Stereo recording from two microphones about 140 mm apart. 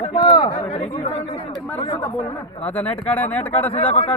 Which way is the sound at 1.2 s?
30° left (ahead or behind).